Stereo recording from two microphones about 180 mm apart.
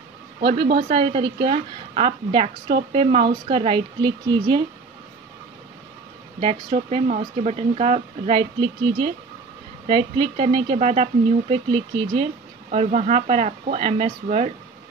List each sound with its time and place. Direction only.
0.4 s a woman's voice: 65° right (ahead or behind)
0.8 s a woman's voice: 30° right (ahead or behind)
6.4 s a woman's voice: 30° right (ahead or behind)
12.7 s speech: 40° right (ahead or behind)